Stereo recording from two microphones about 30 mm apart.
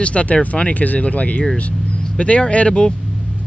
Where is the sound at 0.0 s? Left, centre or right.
Left.